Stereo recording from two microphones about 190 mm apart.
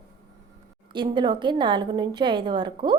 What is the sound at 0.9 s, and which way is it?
A woman's voice, 25° right (ahead or behind).